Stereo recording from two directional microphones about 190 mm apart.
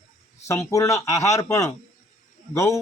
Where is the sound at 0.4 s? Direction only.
15° left (ahead or behind).